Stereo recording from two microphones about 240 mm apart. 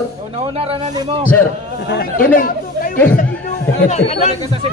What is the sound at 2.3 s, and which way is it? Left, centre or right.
Speech, left.